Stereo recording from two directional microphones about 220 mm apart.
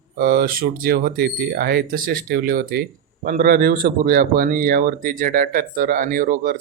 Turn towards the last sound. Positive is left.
turn(degrees=-35)  # may be behind; listen again after turning